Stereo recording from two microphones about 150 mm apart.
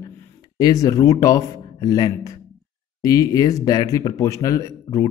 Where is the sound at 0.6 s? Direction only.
25° left (ahead or behind).